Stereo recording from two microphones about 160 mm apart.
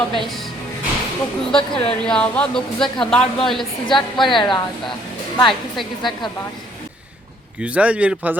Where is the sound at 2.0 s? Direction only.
5° left (ahead or behind).